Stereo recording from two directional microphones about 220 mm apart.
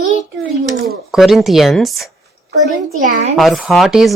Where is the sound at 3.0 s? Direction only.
35° right (ahead or behind).